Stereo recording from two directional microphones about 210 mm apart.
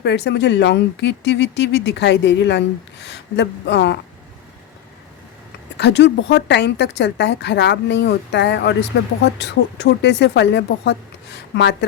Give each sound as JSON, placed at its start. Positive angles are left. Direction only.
{"t": 0.0, "sound": "speech", "side_deg": 55}
{"t": 5.7, "sound": "speech", "side_deg": 55}